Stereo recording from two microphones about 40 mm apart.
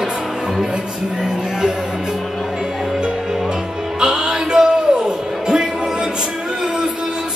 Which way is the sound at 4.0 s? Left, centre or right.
Centre.